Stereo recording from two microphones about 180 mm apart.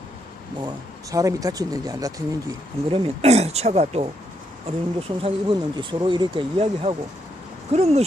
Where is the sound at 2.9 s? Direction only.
35° right (ahead or behind).